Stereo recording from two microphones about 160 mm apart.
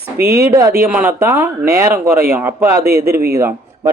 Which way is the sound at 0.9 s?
15° right (ahead or behind).